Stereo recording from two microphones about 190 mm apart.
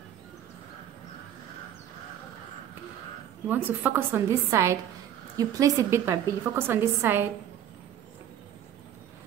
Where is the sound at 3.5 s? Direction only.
10° right (ahead or behind).